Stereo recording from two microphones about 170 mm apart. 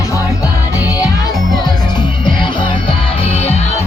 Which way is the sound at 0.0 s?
20° left (ahead or behind).